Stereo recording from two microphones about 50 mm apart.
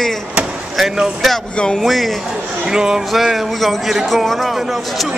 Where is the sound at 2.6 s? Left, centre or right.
Centre.